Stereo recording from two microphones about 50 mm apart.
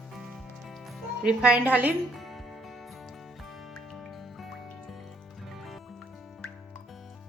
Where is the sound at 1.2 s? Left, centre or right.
Centre.